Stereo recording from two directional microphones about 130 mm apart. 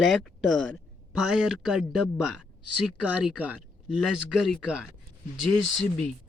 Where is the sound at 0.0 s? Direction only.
Centre (ahead or behind).